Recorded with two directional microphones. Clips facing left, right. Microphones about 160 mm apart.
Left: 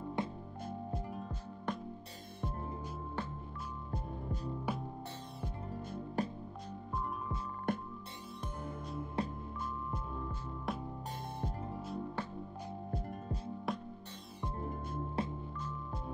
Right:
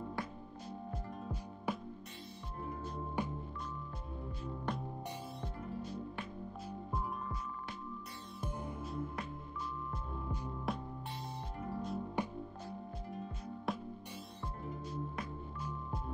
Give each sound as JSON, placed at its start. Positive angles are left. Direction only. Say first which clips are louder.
{"t": 0.2, "sound": "music", "louder": "left 7 dB", "side_deg": 20}
{"t": 1.7, "sound": "music", "louder": "even", "side_deg": -5}
{"t": 3.2, "sound": "music", "louder": "right 3 dB", "side_deg": -15}
{"t": 4.7, "sound": "music", "louder": "left 1 dB", "side_deg": 5}
{"t": 6.2, "sound": "music", "louder": "left 9 dB", "side_deg": 40}
{"t": 7.7, "sound": "music", "louder": "left 12 dB", "side_deg": 55}
{"t": 9.2, "sound": "music", "louder": "left 7 dB", "side_deg": 30}
{"t": 10.7, "sound": "music", "louder": "even", "side_deg": 0}
{"t": 12.2, "sound": "music", "louder": "right 3 dB", "side_deg": -15}
{"t": 12.9, "sound": "music", "louder": "left 4 dB", "side_deg": 45}
{"t": 13.7, "sound": "music", "louder": "even", "side_deg": 0}
{"t": 15.2, "sound": "music", "louder": "left 6 dB", "side_deg": 30}